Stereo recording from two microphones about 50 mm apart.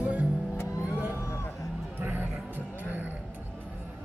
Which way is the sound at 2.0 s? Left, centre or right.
Right.